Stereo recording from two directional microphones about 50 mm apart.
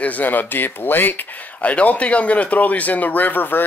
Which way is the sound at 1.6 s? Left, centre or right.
Left.